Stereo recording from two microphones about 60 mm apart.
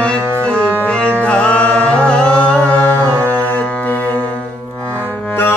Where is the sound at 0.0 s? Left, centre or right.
Centre.